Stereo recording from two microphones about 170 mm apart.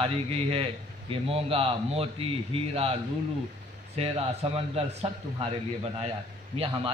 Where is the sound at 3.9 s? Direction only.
35° right (ahead or behind).